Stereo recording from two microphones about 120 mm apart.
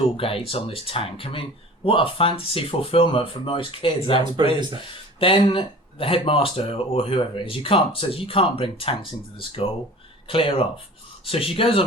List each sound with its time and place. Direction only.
0.2 s speech: 50° left (ahead or behind)
4.4 s speech: 40° right (ahead or behind)
5.2 s speech: 50° left (ahead or behind)